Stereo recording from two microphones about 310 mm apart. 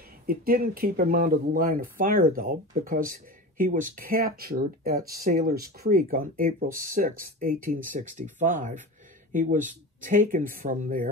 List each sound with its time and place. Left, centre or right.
0.3 s speech: right